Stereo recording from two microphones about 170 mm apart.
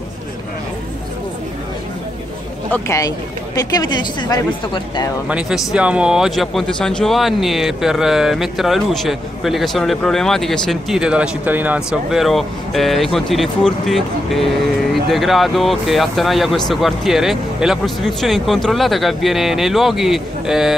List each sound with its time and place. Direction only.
2.7 s speech: 20° left (ahead or behind)
5.3 s speech: 5° right (ahead or behind)